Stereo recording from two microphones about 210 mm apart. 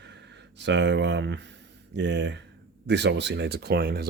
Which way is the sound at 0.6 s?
55° right (ahead or behind).